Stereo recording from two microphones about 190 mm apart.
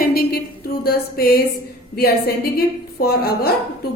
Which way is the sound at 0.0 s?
55° left (ahead or behind).